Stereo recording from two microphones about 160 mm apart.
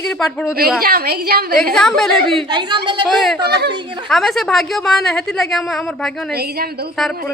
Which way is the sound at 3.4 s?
90° right.